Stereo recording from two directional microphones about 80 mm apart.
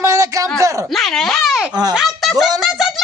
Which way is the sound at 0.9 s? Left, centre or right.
Centre.